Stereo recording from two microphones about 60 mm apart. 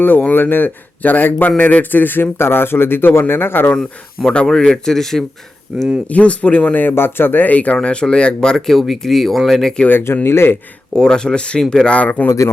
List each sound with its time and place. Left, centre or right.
0.0 s speech: left
3.8 s speech: centre
5.7 s speech: centre
6.1 s speech: left
7.8 s speech: centre
10.2 s speech: left
10.9 s speech: centre
11.9 s speech: left